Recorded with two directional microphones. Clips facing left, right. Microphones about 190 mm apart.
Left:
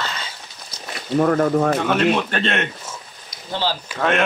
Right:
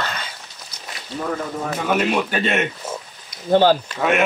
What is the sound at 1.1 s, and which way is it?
Speech, 65° left (ahead or behind).